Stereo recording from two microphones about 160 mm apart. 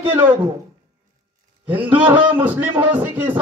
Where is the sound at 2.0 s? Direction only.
10° right (ahead or behind).